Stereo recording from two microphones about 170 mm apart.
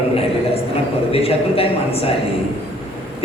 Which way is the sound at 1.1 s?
35° left (ahead or behind).